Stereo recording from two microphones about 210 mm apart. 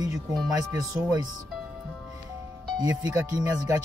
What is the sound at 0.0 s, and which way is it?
Speech, 15° right (ahead or behind).